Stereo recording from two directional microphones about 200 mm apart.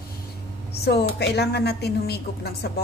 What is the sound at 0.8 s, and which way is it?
A woman's voice, 55° left (ahead or behind).